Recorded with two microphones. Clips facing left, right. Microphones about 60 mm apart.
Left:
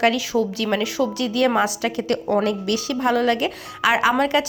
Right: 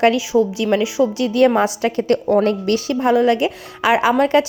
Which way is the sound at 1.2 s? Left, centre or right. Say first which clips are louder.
Right 4 dB; right.